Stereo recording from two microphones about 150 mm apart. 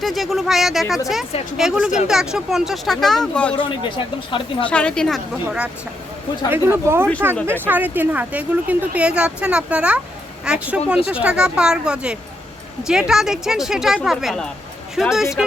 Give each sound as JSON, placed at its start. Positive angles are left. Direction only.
{"t": 0.0, "sound": "speech", "side_deg": 0}
{"t": 3.6, "sound": "speech", "side_deg": 35}
{"t": 4.7, "sound": "speech", "side_deg": 5}